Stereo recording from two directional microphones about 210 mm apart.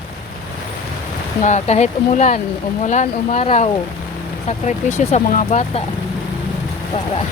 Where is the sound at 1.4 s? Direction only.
35° left (ahead or behind).